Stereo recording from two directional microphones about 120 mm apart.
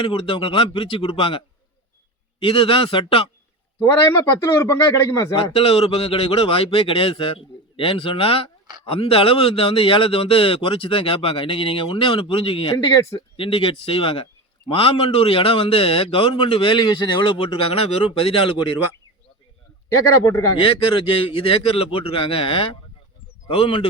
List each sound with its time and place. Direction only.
0.0 s a man's voice: 45° left (ahead or behind)
2.4 s a man's voice: 45° left (ahead or behind)
3.8 s a man's voice: 20° left (ahead or behind)
5.4 s a man's voice: 50° left (ahead or behind)
20.2 s a man's voice: 25° left (ahead or behind)
21.1 s a man's voice: 50° left (ahead or behind)